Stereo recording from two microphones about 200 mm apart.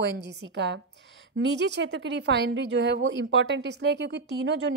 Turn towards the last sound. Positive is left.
turn(degrees=-65)  # may be behind; listen again after turning